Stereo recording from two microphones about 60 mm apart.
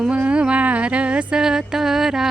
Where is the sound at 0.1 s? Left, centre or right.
Centre.